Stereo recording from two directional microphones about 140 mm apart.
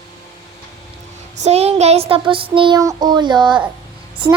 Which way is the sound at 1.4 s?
45° right (ahead or behind).